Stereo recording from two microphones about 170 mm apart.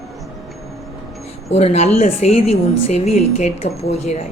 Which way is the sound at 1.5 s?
40° left (ahead or behind).